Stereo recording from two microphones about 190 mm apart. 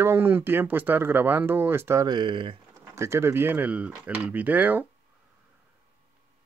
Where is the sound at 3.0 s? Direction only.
15° right (ahead or behind).